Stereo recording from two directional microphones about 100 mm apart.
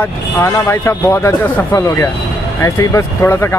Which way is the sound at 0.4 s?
25° left (ahead or behind).